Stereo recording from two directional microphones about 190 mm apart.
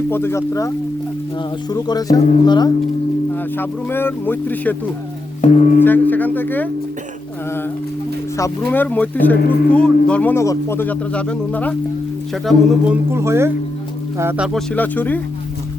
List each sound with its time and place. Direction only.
0.1 s speech: 15° left (ahead or behind)
1.7 s speech: 20° left (ahead or behind)
3.3 s speech: 10° left (ahead or behind)
5.4 s speech: 40° left (ahead or behind)
5.8 s speech: 10° left (ahead or behind)
8.4 s speech: 15° left (ahead or behind)
13.1 s speech: 15° right (ahead or behind); by 15.2 s 10° left (ahead or behind)